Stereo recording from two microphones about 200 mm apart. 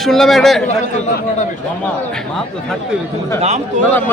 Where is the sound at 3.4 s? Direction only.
35° right (ahead or behind).